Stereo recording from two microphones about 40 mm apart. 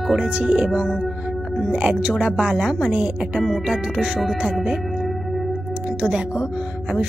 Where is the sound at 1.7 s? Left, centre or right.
Right.